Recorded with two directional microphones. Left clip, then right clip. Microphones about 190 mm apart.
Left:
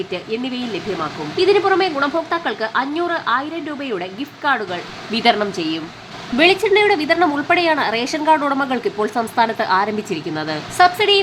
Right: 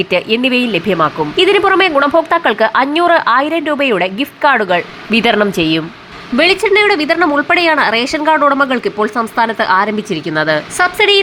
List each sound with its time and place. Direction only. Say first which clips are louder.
0.1 s speech: right 12 dB; 30° right (ahead or behind)
6.3 s speech: right 4 dB; 20° right (ahead or behind)